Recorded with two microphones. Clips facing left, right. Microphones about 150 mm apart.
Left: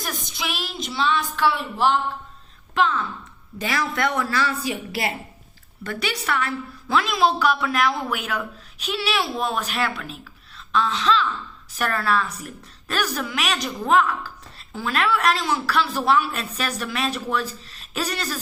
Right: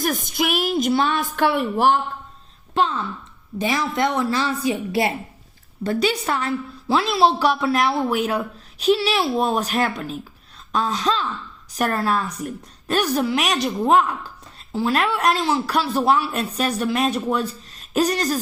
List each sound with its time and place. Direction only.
0.0 s a woman's voice: 50° right (ahead or behind)
2.7 s a woman's voice: 30° right (ahead or behind)
3.6 s speech: 20° right (ahead or behind)
5.8 s a woman's voice: 40° right (ahead or behind)